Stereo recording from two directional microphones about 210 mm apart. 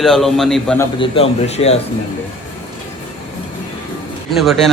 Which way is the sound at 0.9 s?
25° left (ahead or behind).